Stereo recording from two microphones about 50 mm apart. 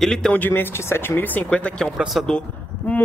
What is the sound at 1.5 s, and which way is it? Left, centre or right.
Speech, left.